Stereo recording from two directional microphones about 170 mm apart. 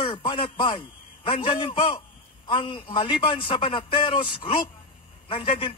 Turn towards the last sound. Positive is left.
turn(degrees=30)  # may be behind; listen again after turning